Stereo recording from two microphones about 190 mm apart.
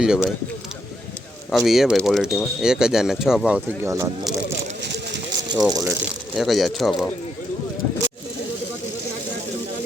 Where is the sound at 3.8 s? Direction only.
15° right (ahead or behind).